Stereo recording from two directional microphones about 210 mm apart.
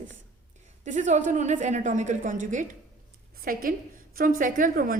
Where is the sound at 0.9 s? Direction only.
35° right (ahead or behind).